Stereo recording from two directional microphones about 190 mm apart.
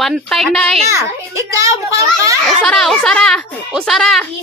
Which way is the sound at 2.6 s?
Centre (ahead or behind).